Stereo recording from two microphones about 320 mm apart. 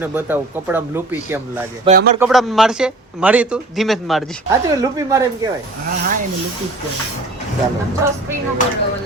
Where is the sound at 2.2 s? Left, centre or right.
Centre.